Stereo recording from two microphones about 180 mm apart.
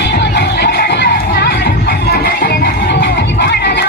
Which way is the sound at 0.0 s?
70° left (ahead or behind).